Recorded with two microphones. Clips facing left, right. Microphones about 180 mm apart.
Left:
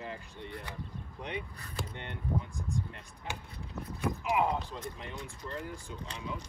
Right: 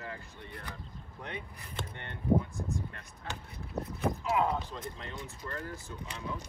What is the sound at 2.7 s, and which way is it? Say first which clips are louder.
Speech: left 1 dB; 15° left (ahead or behind).